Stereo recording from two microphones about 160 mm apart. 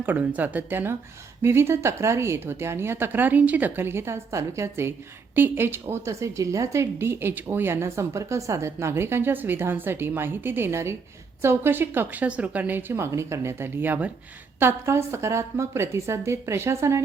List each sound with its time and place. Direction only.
0.0 s a woman's voice: 10° right (ahead or behind)